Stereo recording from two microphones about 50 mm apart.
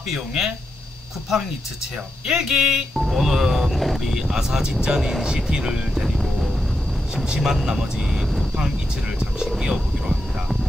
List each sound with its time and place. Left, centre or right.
0.1 s speech: centre
6.0 s music: centre
7.2 s speech: centre
9.5 s speech: centre